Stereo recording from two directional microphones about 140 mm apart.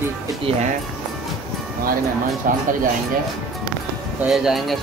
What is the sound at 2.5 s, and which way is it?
Speech, 80° right.